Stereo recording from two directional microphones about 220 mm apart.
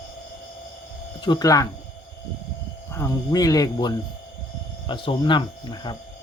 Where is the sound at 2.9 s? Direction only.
15° left (ahead or behind).